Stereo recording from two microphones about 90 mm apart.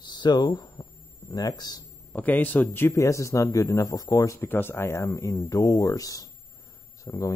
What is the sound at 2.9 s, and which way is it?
Speech, 35° left (ahead or behind).